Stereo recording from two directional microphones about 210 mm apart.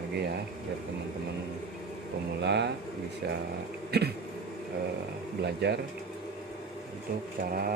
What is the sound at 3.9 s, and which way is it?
Speech, 50° right (ahead or behind).